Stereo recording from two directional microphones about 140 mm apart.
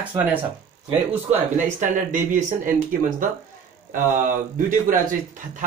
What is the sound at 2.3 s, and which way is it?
Speech, 70° right (ahead or behind).